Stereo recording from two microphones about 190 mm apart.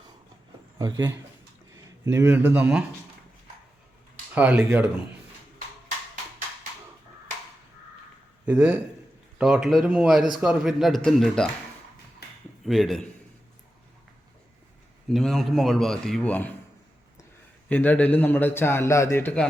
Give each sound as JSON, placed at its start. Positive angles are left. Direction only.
{"t": 0.8, "sound": "speech", "side_deg": -20}
{"t": 4.4, "sound": "speech", "side_deg": -10}
{"t": 8.4, "sound": "speech", "side_deg": -5}
{"t": 12.6, "sound": "speech", "side_deg": 0}
{"t": 15.1, "sound": "speech", "side_deg": 0}
{"t": 17.7, "sound": "a man's voice", "side_deg": 10}